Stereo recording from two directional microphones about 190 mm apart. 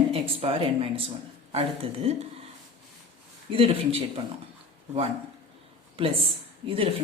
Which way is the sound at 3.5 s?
30° right (ahead or behind).